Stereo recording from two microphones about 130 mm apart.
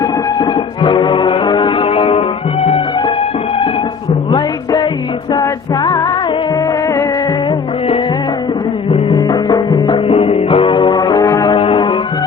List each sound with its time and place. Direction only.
0.0 s music: 35° left (ahead or behind)
4.3 s music: 35° left (ahead or behind)
8.9 s music: 35° left (ahead or behind)